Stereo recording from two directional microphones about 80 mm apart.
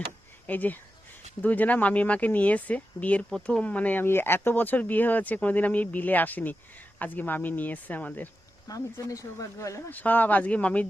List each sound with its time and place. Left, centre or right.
0.4 s speech: left
8.6 s speech: left
9.9 s speech: left